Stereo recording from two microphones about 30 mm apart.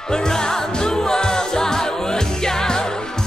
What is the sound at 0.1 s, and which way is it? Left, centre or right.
Music, left.